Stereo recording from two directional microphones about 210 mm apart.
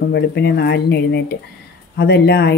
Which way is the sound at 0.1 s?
55° left (ahead or behind).